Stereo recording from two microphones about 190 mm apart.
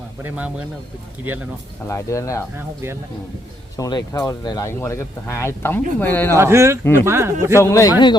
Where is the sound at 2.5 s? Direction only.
15° right (ahead or behind).